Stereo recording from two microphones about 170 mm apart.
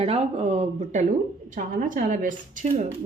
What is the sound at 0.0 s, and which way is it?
Speech, 35° right (ahead or behind).